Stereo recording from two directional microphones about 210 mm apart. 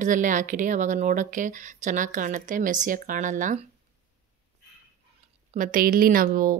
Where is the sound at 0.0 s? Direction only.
40° right (ahead or behind).